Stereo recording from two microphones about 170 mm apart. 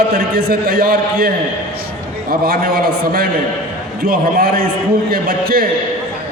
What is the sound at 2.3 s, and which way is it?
A man's voice, 60° right (ahead or behind).